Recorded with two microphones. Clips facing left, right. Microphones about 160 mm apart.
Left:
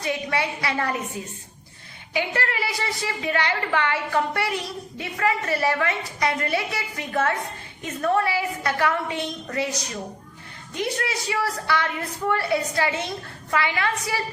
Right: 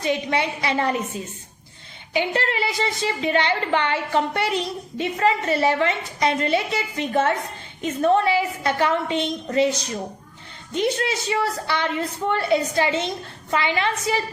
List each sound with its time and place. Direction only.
0.0 s a woman's voice: 20° right (ahead or behind)